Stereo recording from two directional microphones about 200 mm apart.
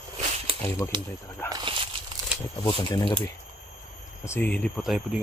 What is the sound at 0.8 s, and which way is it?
Speech, 15° left (ahead or behind).